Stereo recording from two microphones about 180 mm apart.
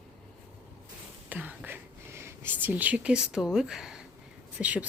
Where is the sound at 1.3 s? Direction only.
10° right (ahead or behind).